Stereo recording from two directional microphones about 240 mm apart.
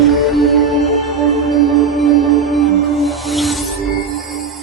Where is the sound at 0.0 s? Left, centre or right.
Centre.